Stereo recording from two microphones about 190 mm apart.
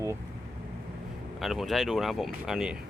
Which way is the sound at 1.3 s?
Centre (ahead or behind).